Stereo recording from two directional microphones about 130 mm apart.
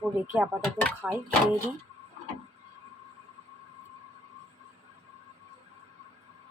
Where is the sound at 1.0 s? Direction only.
20° right (ahead or behind).